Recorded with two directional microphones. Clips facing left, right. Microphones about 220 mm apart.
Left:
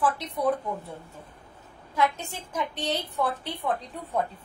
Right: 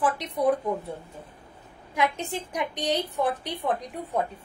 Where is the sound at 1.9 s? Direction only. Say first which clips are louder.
Even; 15° right (ahead or behind).